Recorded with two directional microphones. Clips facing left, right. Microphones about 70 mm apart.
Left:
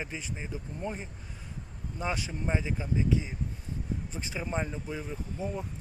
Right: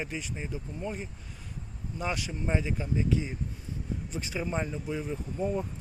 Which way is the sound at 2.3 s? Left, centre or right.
Centre.